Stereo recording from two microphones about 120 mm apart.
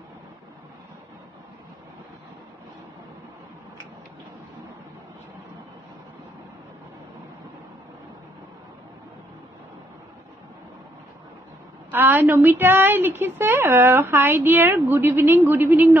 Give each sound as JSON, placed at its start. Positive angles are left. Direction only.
{"t": 11.9, "sound": "a woman's voice", "side_deg": -15}